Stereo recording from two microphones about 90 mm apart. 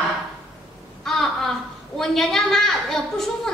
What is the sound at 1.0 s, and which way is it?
A woman's voice, 5° left (ahead or behind).